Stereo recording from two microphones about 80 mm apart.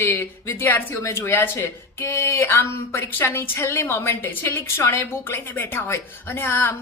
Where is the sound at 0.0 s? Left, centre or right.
Left.